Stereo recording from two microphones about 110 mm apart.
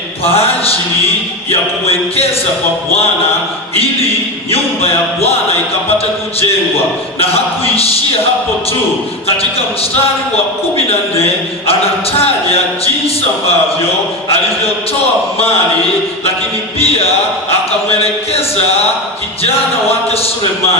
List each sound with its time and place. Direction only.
0.3 s a man's voice: 65° left (ahead or behind)
4.5 s a man's voice: 65° left (ahead or behind)
7.2 s a man's voice: 65° left (ahead or behind)
10.8 s a man's voice: 60° left (ahead or behind)
17.8 s a man's voice: 65° left (ahead or behind)